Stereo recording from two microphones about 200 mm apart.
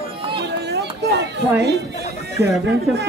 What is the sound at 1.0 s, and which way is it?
Speech, 55° right (ahead or behind).